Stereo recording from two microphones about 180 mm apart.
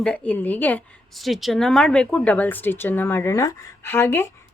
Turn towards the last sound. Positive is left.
turn(degrees=10)  # may be behind; listen again after turning